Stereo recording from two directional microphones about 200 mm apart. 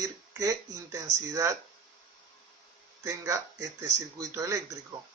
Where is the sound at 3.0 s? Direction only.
15° right (ahead or behind).